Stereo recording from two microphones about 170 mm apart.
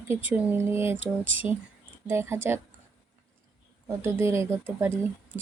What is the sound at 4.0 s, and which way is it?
Speech, 15° right (ahead or behind).